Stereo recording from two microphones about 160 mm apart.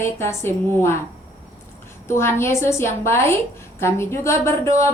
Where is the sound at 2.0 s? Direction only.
15° left (ahead or behind).